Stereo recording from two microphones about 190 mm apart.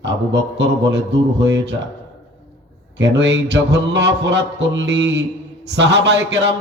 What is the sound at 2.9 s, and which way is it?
A man's voice, 70° right (ahead or behind).